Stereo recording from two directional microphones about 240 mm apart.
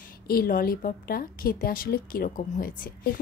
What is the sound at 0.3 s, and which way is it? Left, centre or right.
A woman's voice, left.